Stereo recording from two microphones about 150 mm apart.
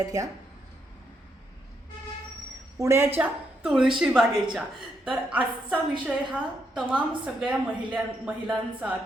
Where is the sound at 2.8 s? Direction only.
15° right (ahead or behind).